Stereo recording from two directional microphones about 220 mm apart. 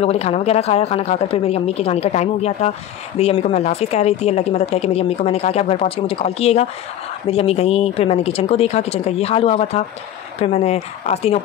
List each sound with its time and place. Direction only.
0.0 s a woman's voice: 30° left (ahead or behind)